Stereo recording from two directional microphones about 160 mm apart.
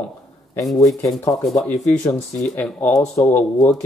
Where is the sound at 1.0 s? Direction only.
20° left (ahead or behind).